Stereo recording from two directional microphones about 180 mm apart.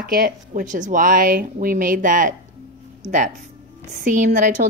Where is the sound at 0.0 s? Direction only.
55° right (ahead or behind).